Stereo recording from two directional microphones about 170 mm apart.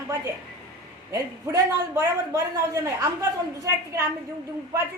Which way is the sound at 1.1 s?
20° right (ahead or behind).